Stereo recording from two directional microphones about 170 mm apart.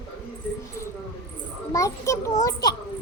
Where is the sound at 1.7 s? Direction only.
20° left (ahead or behind).